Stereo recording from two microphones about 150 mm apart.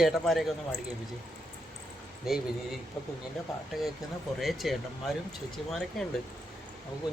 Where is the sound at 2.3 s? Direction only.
5° right (ahead or behind).